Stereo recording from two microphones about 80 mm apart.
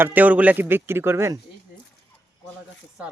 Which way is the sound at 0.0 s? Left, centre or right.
Right.